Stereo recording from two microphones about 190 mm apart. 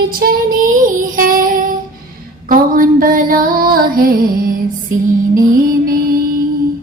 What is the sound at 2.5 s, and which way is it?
Music, 45° right (ahead or behind).